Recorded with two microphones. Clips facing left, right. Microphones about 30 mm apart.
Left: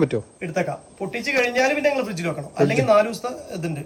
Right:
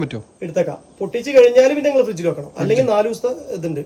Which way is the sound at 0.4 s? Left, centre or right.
Left.